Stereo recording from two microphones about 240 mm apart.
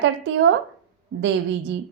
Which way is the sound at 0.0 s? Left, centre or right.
Right.